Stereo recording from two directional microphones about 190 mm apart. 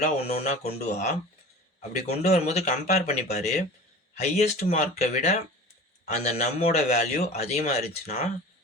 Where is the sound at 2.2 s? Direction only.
35° left (ahead or behind).